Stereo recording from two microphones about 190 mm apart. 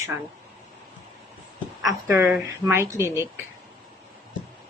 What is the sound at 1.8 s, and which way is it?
Speech, 15° right (ahead or behind).